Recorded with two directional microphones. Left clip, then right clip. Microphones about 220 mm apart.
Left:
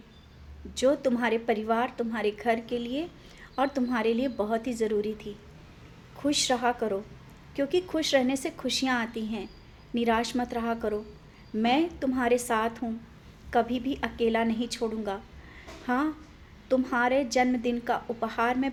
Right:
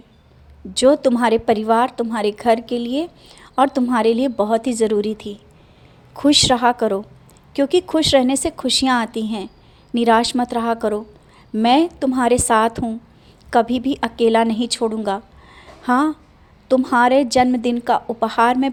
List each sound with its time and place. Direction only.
0.7 s a woman's voice: 35° right (ahead or behind)